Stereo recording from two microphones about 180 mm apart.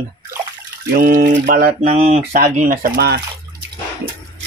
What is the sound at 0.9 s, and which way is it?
Speech, 55° right (ahead or behind).